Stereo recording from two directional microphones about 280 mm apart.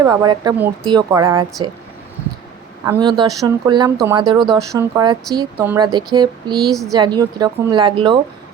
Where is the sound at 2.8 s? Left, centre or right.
Centre.